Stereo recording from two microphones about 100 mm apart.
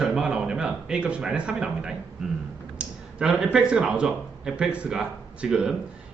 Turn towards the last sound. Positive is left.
turn(degrees=-10)  # may be behind; listen again after turning